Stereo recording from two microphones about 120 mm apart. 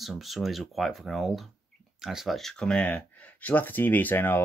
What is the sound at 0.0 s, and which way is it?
Speech, centre (ahead or behind).